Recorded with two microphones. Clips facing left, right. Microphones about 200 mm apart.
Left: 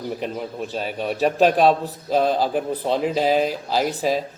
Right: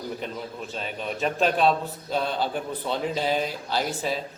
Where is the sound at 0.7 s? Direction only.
40° left (ahead or behind).